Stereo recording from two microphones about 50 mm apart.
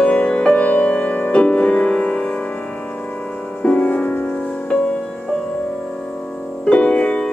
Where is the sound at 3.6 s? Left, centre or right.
Left.